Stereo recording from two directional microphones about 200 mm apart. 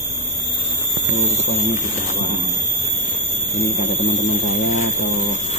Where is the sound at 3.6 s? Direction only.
55° left (ahead or behind).